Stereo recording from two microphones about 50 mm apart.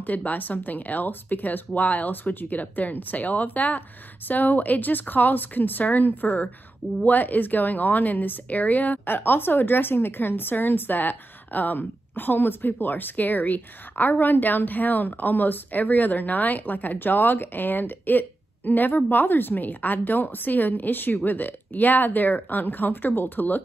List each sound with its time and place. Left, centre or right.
0.0 s a woman's voice: left